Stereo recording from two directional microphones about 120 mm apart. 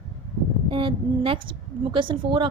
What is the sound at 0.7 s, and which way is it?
Speech, 45° right (ahead or behind).